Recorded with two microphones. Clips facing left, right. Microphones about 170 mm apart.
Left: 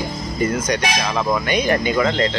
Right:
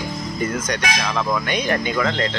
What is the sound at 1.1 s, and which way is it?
Speech, 15° left (ahead or behind).